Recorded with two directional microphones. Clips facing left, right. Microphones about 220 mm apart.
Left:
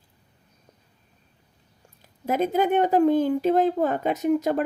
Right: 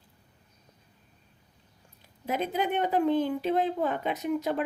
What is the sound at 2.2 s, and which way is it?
Speech, 45° left (ahead or behind).